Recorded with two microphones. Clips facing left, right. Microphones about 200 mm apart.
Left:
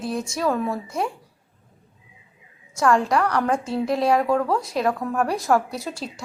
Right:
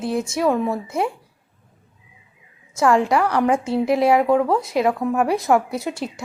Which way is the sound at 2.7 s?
25° right (ahead or behind).